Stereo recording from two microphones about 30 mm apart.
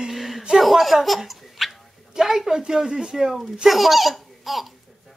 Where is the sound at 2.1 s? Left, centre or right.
Centre.